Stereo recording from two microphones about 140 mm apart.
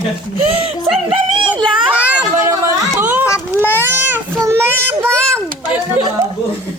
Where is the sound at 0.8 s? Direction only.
5° right (ahead or behind).